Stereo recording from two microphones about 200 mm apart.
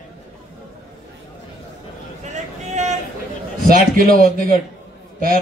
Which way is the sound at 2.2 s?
35° right (ahead or behind).